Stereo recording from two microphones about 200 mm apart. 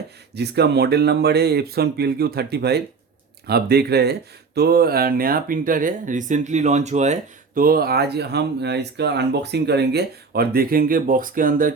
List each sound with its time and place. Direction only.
0.3 s speech: 55° right (ahead or behind)